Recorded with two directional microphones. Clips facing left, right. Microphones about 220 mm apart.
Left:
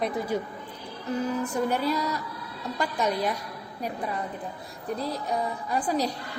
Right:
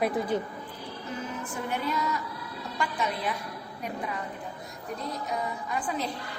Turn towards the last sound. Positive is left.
turn(degrees=35)  # may be behind; listen again after turning